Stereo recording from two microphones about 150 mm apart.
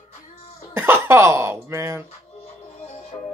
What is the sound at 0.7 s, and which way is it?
Speech, 15° right (ahead or behind).